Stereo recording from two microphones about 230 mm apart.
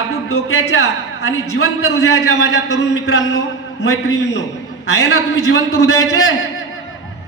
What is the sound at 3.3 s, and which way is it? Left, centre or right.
Speech, left.